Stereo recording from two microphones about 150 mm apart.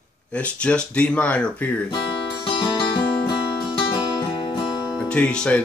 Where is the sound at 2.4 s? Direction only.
35° left (ahead or behind).